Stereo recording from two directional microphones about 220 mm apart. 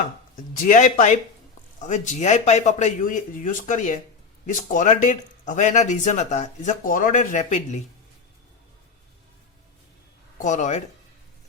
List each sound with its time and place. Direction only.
0.3 s speech: 35° left (ahead or behind)
10.3 s speech: 35° left (ahead or behind)